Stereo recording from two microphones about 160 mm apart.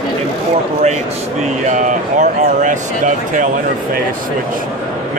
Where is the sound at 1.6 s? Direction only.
50° right (ahead or behind).